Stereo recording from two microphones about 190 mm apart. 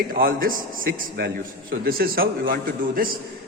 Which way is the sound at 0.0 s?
50° right (ahead or behind).